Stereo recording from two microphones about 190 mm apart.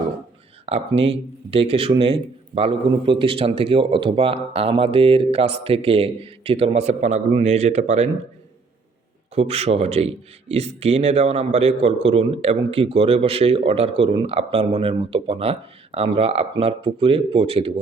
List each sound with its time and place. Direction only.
0.6 s a man's voice: 30° right (ahead or behind)
9.3 s a man's voice: 35° right (ahead or behind)